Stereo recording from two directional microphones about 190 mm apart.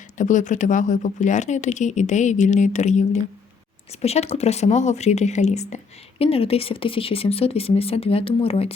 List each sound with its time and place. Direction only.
0.2 s speech: 40° left (ahead or behind)